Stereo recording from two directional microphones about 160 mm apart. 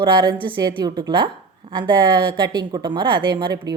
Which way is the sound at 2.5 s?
25° right (ahead or behind).